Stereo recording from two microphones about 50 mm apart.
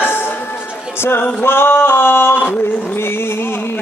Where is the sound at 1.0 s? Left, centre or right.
Left.